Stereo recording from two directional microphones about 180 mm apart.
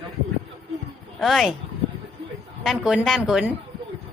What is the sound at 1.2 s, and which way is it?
Speech, centre (ahead or behind).